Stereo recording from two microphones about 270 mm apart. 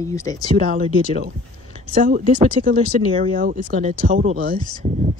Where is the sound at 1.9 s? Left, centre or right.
Right.